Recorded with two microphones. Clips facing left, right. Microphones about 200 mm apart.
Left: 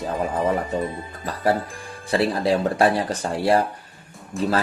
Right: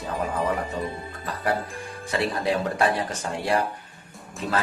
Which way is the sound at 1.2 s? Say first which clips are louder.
Left 5 dB; 35° left (ahead or behind).